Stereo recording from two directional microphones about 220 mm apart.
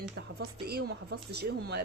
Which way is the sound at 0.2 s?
45° right (ahead or behind).